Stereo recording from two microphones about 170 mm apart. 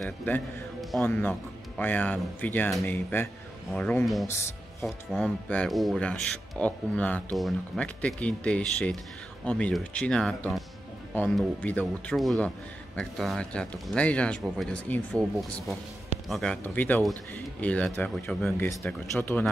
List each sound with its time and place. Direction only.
0.0 s a man's voice: 5° left (ahead or behind)
4.3 s a man's voice: 15° left (ahead or behind)
4.8 s a man's voice: 5° left (ahead or behind)